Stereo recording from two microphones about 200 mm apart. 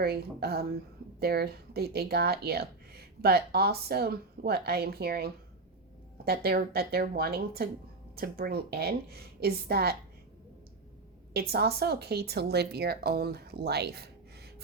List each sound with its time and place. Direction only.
0.0 s speech: 50° right (ahead or behind)
11.3 s speech: 50° right (ahead or behind)